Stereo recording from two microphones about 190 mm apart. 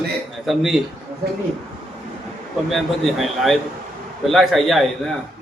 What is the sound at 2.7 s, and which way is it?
Speech, centre (ahead or behind).